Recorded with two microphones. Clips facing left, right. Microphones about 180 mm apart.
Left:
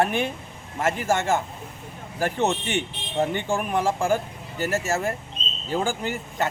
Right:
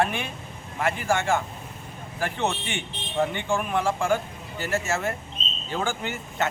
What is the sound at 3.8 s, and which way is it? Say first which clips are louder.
Speech: left 1 dB; 40° left (ahead or behind).